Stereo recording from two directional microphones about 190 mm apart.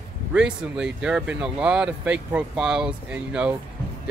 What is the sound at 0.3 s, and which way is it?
Speech, 5° right (ahead or behind).